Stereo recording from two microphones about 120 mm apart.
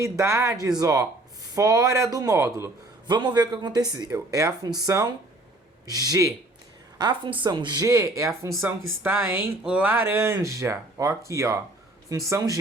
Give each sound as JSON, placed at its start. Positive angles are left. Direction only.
{"t": 0.0, "sound": "speech", "side_deg": -25}
{"t": 3.1, "sound": "speech", "side_deg": -40}
{"t": 7.0, "sound": "speech", "side_deg": -45}